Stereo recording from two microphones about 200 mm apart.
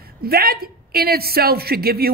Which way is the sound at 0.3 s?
50° right (ahead or behind).